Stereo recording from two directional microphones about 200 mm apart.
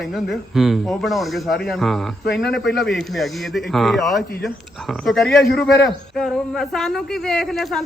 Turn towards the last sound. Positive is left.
turn(degrees=0)  # may be behind; listen again after turning